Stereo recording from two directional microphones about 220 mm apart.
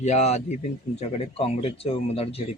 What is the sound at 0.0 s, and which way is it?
Speech, 30° left (ahead or behind).